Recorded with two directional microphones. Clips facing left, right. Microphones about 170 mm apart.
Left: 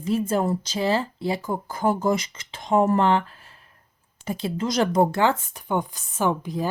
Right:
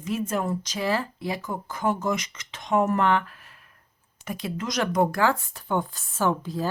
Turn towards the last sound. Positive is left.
turn(degrees=15)  # may be behind; listen again after turning